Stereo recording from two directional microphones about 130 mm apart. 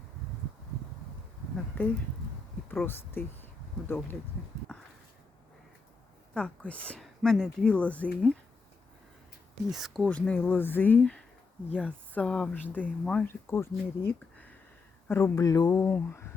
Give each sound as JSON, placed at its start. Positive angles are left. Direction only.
{"t": 1.7, "sound": "speech", "side_deg": 15}
{"t": 6.3, "sound": "speech", "side_deg": 10}
{"t": 9.6, "sound": "speech", "side_deg": 0}
{"t": 13.2, "sound": "speech", "side_deg": 20}
{"t": 15.0, "sound": "speech", "side_deg": 20}